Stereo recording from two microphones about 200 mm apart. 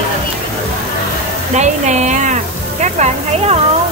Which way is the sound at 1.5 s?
35° right (ahead or behind).